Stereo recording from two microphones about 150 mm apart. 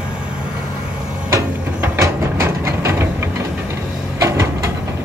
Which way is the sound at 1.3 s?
20° right (ahead or behind).